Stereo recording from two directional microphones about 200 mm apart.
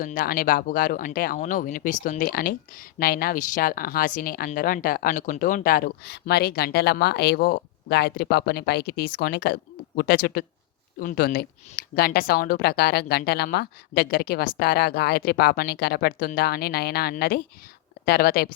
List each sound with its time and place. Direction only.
0.0 s speech: 45° left (ahead or behind)